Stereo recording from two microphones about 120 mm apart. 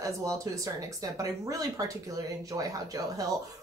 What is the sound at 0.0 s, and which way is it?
A woman's voice, 25° right (ahead or behind).